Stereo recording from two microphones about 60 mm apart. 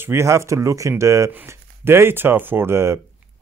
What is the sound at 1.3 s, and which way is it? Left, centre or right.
Speech, right.